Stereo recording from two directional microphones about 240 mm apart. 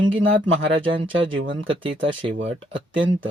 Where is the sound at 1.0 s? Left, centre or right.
Right.